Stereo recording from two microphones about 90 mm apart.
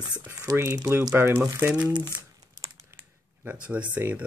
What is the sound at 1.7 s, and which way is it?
Speech, 15° right (ahead or behind).